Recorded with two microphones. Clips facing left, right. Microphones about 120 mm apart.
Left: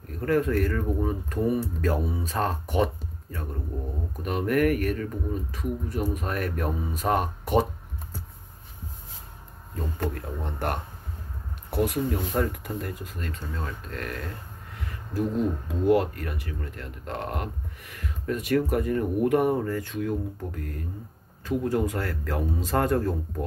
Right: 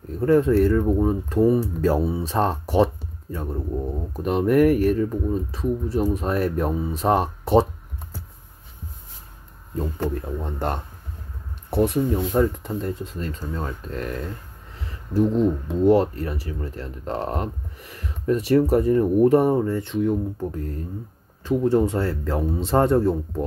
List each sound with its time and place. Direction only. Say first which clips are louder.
0.2 s speech: right 7 dB; 25° right (ahead or behind)
9.8 s speech: right 5 dB; 20° right (ahead or behind)